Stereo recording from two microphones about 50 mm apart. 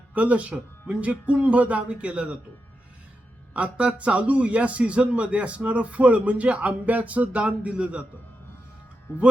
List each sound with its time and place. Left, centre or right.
0.1 s a man's voice: right
3.5 s a man's voice: right